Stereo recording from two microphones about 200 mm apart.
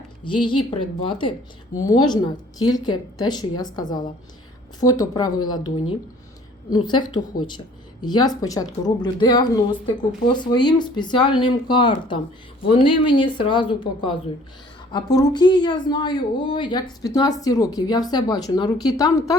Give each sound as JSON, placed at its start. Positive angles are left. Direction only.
{"t": 0.3, "sound": "a woman's voice", "side_deg": 25}
{"t": 6.7, "sound": "a woman's voice", "side_deg": 20}
{"t": 7.3, "sound": "speech", "side_deg": 45}
{"t": 8.0, "sound": "a woman's voice", "side_deg": 20}